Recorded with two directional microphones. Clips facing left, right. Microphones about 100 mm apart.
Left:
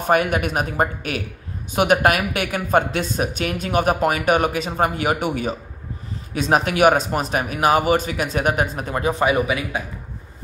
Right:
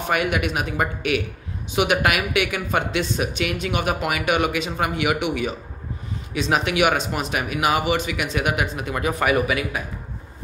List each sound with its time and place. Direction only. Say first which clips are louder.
0.1 s speech: left 4 dB; 40° left (ahead or behind); by 9.8 s 25° left (ahead or behind)